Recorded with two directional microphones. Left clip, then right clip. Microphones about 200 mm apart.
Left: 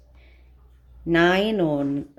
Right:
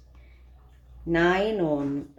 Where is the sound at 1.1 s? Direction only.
50° left (ahead or behind).